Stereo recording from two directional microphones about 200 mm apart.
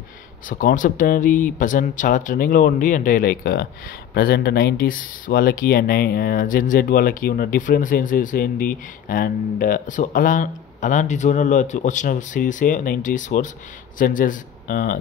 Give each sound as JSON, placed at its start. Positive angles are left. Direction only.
{"t": 0.5, "sound": "speech", "side_deg": 40}